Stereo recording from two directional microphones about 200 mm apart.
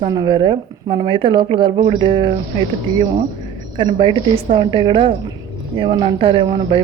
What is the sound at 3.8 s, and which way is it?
Speech, 25° right (ahead or behind).